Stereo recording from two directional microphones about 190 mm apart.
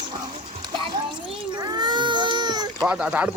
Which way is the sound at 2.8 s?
5° right (ahead or behind).